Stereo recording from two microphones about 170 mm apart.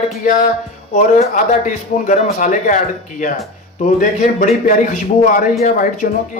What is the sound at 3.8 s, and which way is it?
Speech, 50° left (ahead or behind).